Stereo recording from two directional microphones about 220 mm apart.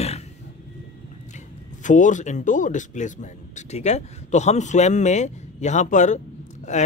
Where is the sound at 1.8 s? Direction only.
35° left (ahead or behind).